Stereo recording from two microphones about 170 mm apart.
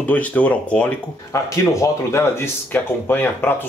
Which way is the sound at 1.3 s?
20° left (ahead or behind).